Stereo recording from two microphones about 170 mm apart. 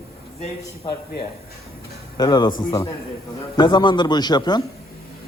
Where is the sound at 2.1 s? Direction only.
25° left (ahead or behind).